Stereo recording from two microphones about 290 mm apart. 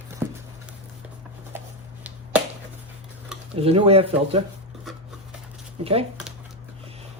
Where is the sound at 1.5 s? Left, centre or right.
Centre.